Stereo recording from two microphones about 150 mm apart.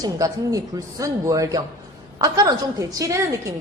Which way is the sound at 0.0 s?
25° right (ahead or behind).